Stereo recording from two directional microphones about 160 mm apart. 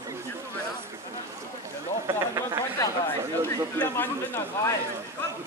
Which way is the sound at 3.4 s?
15° left (ahead or behind).